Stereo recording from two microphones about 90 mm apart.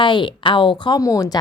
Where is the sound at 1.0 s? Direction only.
40° left (ahead or behind).